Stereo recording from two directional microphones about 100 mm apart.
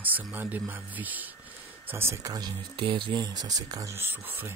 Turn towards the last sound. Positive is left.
turn(degrees=-20)  # may be behind; listen again after turning